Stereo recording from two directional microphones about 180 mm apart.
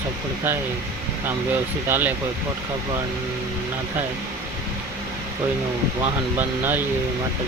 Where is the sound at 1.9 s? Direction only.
10° right (ahead or behind).